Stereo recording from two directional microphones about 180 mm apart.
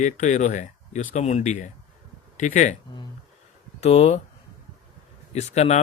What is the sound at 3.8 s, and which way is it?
Speech, 35° left (ahead or behind).